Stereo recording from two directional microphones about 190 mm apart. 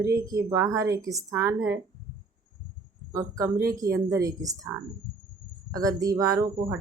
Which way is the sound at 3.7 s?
15° right (ahead or behind).